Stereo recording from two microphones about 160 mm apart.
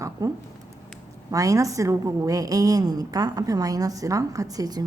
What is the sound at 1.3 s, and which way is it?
A woman's voice, 20° right (ahead or behind).